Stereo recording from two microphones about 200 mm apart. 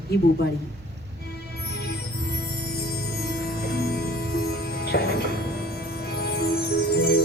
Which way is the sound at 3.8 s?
50° left (ahead or behind).